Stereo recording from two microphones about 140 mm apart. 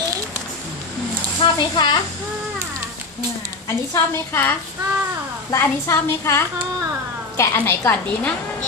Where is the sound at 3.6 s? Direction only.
20° left (ahead or behind).